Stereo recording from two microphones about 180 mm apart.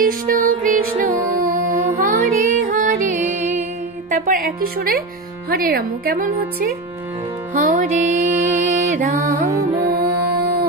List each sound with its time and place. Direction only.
0.3 s music: 50° right (ahead or behind)
4.1 s a woman's voice: 50° right (ahead or behind)
7.5 s music: 50° right (ahead or behind)
9.4 s music: 15° right (ahead or behind)